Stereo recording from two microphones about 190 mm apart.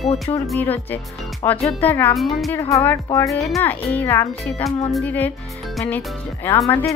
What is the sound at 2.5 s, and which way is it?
Speech, 15° left (ahead or behind).